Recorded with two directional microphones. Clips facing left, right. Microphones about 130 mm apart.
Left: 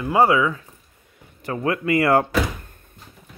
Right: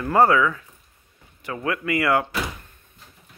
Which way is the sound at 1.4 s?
30° left (ahead or behind).